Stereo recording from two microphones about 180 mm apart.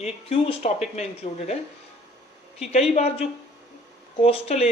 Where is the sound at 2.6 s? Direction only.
35° left (ahead or behind).